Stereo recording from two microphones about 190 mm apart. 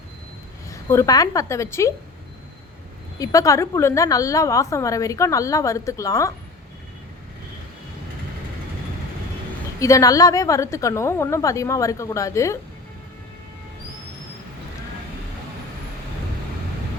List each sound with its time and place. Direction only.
0.7 s a woman's voice: 15° left (ahead or behind)
3.2 s a woman's voice: 15° left (ahead or behind)
9.8 s a woman's voice: 15° left (ahead or behind)